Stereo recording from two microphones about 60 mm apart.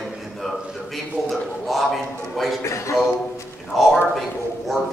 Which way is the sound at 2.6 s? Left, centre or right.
Left.